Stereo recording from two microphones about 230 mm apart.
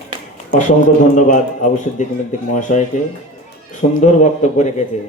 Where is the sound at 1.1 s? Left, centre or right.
Left.